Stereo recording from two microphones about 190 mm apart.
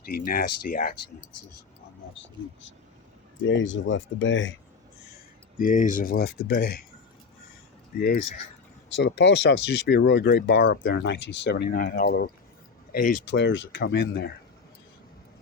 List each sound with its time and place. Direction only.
0.3 s speech: 50° left (ahead or behind)
2.1 s speech: 80° left
5.5 s speech: 45° left (ahead or behind)
7.9 s speech: 50° left (ahead or behind)
9.0 s speech: 65° left (ahead or behind); by 13.1 s 50° left (ahead or behind)
13.3 s speech: 75° left (ahead or behind); by 14.3 s 55° left (ahead or behind)